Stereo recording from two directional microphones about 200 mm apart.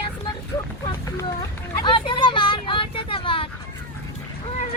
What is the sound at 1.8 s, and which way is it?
Vehicle, 25° left (ahead or behind).